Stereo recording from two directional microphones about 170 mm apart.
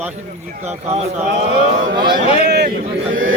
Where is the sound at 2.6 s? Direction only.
55° right (ahead or behind).